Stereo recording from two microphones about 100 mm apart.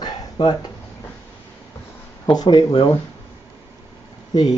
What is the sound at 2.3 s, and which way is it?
Speech, 45° left (ahead or behind).